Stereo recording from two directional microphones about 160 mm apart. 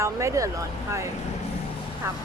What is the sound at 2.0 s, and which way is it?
Speech, 15° right (ahead or behind).